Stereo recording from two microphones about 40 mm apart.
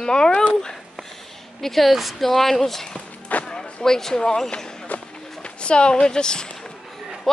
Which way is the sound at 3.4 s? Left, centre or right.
Centre.